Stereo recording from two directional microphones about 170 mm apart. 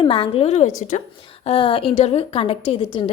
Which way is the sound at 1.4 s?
35° left (ahead or behind).